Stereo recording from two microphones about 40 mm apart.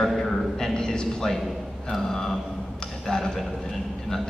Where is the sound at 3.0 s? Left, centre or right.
Centre.